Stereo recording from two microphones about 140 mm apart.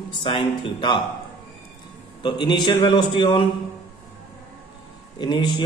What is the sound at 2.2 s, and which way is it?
Mantra, 35° left (ahead or behind).